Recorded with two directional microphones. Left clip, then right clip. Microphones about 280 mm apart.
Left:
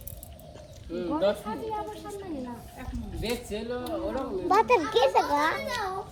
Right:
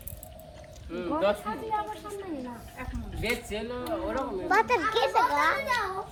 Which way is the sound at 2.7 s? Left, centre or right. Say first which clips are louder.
Right 1 dB; centre.